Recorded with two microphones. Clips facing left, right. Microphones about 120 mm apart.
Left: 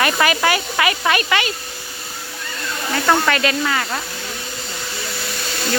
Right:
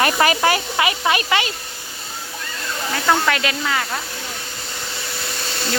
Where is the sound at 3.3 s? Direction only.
5° right (ahead or behind).